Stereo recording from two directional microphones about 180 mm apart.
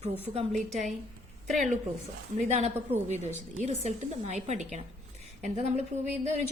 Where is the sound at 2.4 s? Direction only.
40° right (ahead or behind).